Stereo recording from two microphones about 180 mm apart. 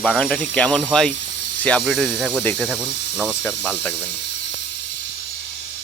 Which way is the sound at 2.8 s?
70° left (ahead or behind).